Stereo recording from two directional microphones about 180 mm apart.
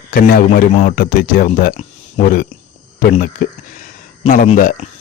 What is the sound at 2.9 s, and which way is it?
Speech, 55° left (ahead or behind).